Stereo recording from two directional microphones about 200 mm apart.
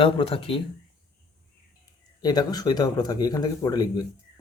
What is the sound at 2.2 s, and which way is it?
Speech, 20° left (ahead or behind).